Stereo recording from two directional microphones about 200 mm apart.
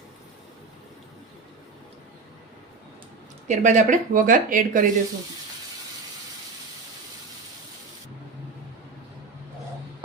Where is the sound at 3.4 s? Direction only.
35° right (ahead or behind).